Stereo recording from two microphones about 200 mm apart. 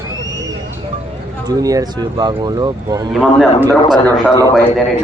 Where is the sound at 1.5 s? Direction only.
20° right (ahead or behind).